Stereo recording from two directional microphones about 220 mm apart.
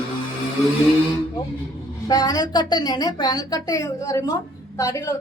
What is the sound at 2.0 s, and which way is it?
A woman's voice, 15° left (ahead or behind).